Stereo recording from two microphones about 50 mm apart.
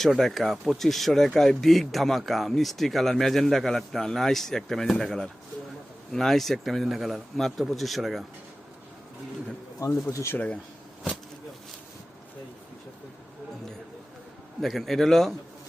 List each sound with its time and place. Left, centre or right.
0.0 s speech: centre
9.8 s speech: left
14.6 s speech: centre